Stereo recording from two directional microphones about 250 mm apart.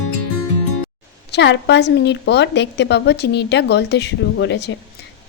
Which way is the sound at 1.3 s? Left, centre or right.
Left.